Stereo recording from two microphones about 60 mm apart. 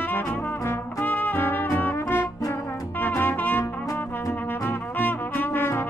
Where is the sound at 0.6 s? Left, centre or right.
Left.